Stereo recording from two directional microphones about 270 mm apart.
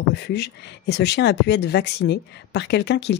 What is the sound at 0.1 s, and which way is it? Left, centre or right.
Speech, left.